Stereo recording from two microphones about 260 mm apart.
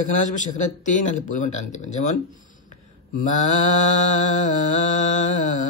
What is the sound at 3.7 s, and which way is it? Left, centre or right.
A man's voice, left.